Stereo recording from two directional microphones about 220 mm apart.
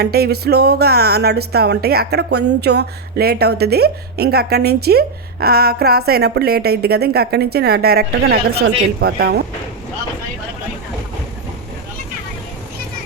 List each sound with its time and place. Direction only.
0.0 s speech: 45° right (ahead or behind)